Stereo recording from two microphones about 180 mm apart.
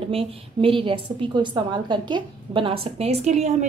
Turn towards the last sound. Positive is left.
turn(degrees=-40)  # may be behind; listen again after turning